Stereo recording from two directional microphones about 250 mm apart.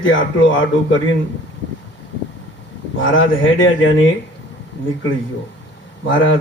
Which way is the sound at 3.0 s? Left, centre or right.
Left.